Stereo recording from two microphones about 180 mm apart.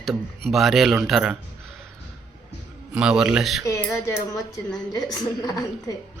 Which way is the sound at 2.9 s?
5° right (ahead or behind).